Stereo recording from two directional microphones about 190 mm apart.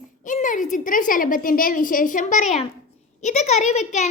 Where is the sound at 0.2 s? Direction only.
40° left (ahead or behind).